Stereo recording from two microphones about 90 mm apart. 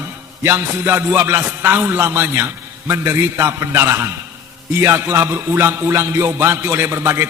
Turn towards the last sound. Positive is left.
turn(degrees=-30)  # may be behind; listen again after turning